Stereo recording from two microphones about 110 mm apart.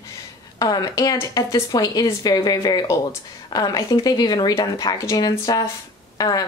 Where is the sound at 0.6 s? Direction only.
35° left (ahead or behind).